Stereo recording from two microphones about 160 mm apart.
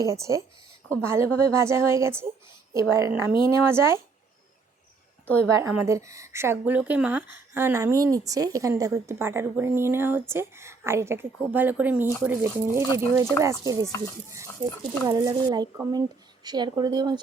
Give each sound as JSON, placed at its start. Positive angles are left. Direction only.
{"t": 0.0, "sound": "a woman's voice", "side_deg": -20}
{"t": 5.5, "sound": "a woman's voice", "side_deg": -15}